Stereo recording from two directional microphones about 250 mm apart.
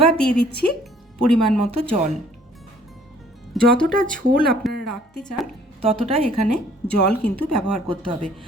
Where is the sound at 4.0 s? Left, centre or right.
Right.